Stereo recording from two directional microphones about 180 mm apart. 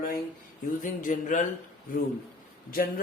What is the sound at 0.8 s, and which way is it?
Speech, 45° left (ahead or behind).